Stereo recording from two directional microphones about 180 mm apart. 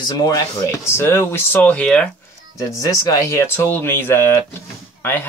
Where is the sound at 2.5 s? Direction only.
20° left (ahead or behind).